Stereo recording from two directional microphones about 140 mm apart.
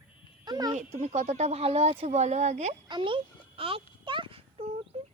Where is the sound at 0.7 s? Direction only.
55° right (ahead or behind).